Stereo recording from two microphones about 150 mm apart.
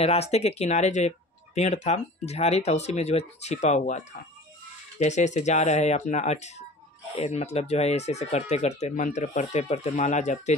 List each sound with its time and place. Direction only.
0.0 s speech: 45° left (ahead or behind)